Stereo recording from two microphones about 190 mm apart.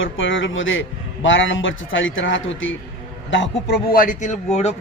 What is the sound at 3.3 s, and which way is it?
A man's voice, 65° left (ahead or behind).